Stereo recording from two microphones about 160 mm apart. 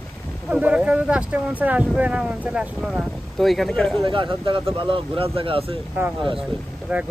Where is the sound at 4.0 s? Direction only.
30° right (ahead or behind).